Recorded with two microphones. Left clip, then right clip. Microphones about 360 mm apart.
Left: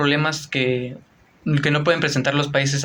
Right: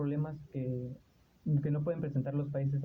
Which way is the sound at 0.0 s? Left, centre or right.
Right.